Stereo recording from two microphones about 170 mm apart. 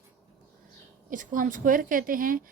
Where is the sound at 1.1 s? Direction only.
50° right (ahead or behind).